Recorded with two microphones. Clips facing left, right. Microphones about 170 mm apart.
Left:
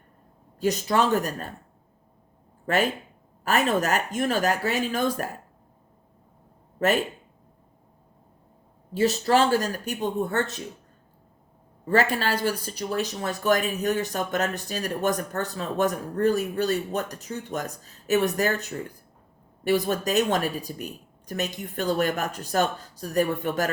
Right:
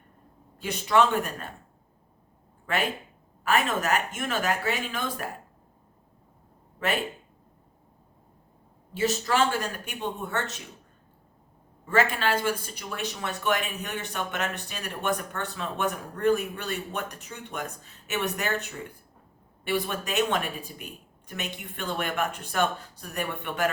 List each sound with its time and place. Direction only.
0.6 s a woman's voice: 40° left (ahead or behind)
2.6 s a woman's voice: 40° left (ahead or behind)
6.7 s speech: 40° left (ahead or behind)
8.9 s a woman's voice: 35° left (ahead or behind)
11.9 s a woman's voice: 40° left (ahead or behind)
19.6 s a woman's voice: 40° left (ahead or behind)